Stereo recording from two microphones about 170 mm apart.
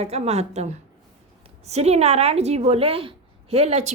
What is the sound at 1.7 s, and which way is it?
A woman's voice, 40° right (ahead or behind).